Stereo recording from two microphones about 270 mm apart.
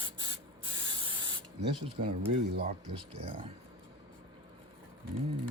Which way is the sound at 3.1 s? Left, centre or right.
Right.